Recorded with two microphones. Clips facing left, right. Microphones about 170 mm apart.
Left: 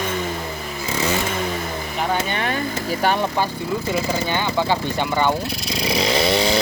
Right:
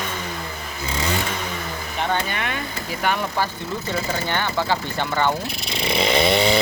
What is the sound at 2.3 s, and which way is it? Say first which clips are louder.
Vehicle: left 4 dB; 35° left (ahead or behind).